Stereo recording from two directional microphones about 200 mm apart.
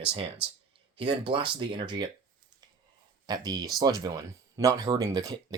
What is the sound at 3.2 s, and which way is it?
Speech, 20° right (ahead or behind).